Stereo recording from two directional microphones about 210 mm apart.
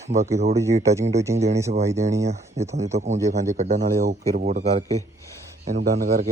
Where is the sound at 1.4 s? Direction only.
30° right (ahead or behind).